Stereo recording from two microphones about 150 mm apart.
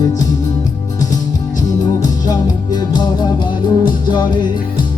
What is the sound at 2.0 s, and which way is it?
Music, 25° left (ahead or behind).